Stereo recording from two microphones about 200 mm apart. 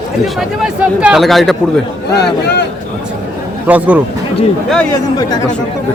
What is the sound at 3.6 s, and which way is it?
Speech, 5° right (ahead or behind).